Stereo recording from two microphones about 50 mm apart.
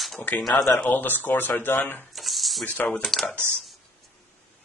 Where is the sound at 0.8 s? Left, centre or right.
Left.